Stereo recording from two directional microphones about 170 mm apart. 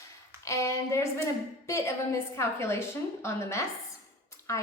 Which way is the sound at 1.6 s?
15° left (ahead or behind).